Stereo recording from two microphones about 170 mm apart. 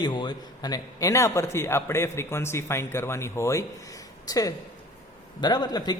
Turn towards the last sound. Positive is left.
turn(degrees=25)  # may be behind; listen again after turning